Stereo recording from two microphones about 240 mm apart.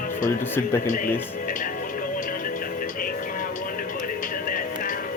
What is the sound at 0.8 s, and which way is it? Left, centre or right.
Speech, left.